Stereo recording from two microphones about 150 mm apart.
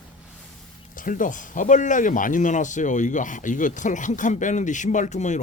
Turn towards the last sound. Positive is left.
turn(degrees=55)  # may be behind; listen again after turning